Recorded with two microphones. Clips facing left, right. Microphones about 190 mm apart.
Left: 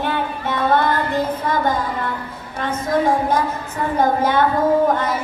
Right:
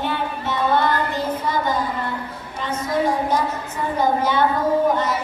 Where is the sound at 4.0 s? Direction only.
50° left (ahead or behind).